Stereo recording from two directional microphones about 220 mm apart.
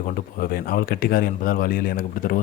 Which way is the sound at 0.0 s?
40° left (ahead or behind).